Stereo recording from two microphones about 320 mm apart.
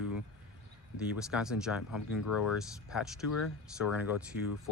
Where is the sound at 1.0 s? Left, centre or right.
Centre.